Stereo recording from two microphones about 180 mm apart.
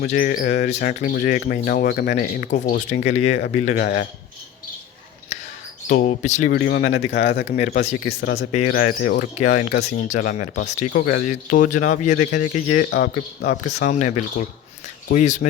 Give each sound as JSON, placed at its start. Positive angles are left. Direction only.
{"t": 0.0, "sound": "speech", "side_deg": 50}
{"t": 5.9, "sound": "speech", "side_deg": 40}
{"t": 6.5, "sound": "speech", "side_deg": 60}
{"t": 9.3, "sound": "speech", "side_deg": 45}
{"t": 12.9, "sound": "speech", "side_deg": 65}
{"t": 13.7, "sound": "speech", "side_deg": 40}